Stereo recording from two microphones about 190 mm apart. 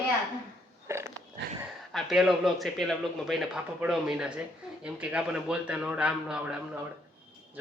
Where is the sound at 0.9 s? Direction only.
15° right (ahead or behind).